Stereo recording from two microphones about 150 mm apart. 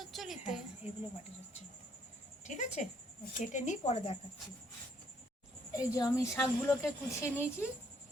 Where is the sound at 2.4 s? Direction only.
50° left (ahead or behind).